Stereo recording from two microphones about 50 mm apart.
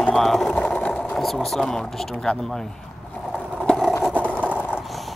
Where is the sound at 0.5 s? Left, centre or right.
Left.